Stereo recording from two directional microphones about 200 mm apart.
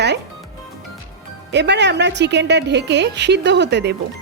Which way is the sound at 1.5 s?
60° right (ahead or behind).